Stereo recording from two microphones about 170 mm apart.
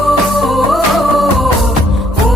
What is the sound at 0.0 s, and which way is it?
Music, centre (ahead or behind).